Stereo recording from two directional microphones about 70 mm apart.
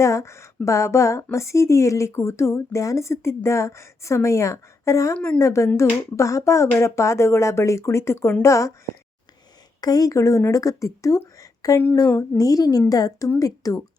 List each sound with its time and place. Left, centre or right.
0.0 s a woman's voice: left
9.8 s a woman's voice: left
11.3 s a sound: left
12.4 s a woman's voice: left